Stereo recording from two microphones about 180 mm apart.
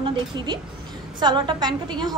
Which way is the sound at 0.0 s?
30° right (ahead or behind).